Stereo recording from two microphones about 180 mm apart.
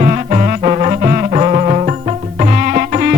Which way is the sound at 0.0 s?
35° right (ahead or behind).